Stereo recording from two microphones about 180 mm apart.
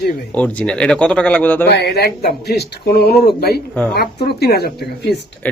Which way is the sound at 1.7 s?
65° left (ahead or behind).